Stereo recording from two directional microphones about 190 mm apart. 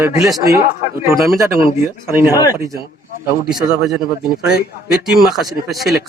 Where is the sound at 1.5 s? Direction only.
15° right (ahead or behind).